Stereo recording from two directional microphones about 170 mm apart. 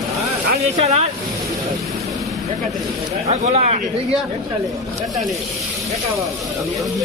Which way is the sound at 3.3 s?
40° right (ahead or behind).